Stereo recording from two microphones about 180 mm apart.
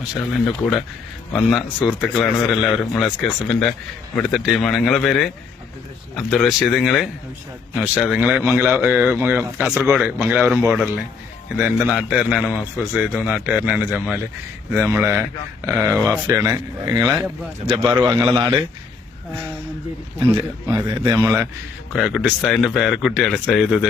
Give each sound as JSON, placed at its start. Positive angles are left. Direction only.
{"t": 0.0, "sound": "speech", "side_deg": -5}
{"t": 20.7, "sound": "speech", "side_deg": -20}
{"t": 21.9, "sound": "speech", "side_deg": 0}